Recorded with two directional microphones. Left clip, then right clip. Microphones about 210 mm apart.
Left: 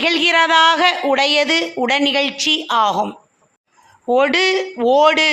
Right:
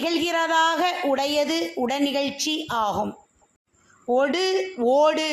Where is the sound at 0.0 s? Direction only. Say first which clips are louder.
Left 9 dB; 10° left (ahead or behind).